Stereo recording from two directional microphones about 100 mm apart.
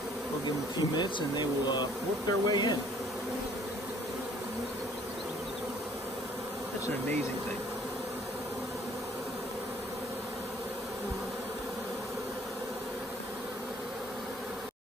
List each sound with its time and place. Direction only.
0.7 s speech: 45° left (ahead or behind)